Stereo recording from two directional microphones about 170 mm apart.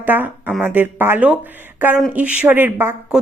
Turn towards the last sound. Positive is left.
turn(degrees=-10)  # may be behind; listen again after turning